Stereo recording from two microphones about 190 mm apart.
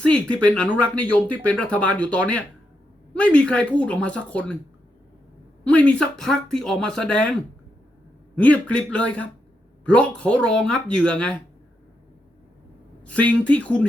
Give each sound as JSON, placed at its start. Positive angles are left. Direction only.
{"t": 0.0, "sound": "speech", "side_deg": 5}
{"t": 5.6, "sound": "speech", "side_deg": 5}
{"t": 8.4, "sound": "speech", "side_deg": 5}
{"t": 13.1, "sound": "speech", "side_deg": 5}